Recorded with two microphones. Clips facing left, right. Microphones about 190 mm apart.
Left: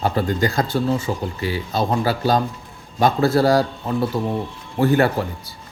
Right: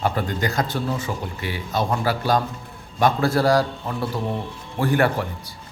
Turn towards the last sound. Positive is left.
turn(degrees=25)  # may be behind; listen again after turning